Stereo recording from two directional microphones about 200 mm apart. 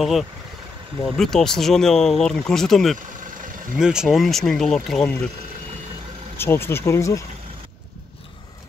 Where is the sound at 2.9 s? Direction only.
40° right (ahead or behind).